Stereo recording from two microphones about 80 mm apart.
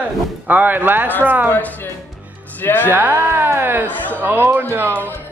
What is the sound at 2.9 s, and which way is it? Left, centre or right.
Speech, right.